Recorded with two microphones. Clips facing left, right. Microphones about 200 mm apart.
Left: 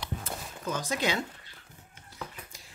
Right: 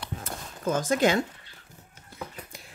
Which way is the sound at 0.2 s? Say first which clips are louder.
Right 4 dB; 50° right (ahead or behind).